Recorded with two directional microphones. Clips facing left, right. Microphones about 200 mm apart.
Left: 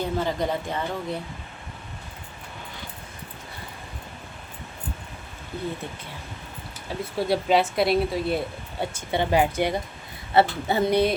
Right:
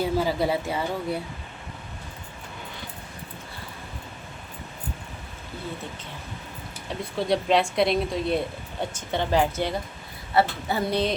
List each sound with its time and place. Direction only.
0.0 s speech: 5° right (ahead or behind)
7.0 s a woman's voice: 5° left (ahead or behind)
10.3 s speech: 25° left (ahead or behind)